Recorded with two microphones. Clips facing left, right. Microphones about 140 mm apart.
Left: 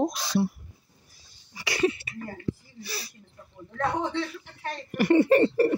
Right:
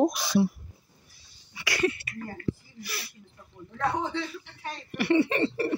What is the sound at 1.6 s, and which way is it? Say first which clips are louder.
Speech: left 2 dB; 25° left (ahead or behind).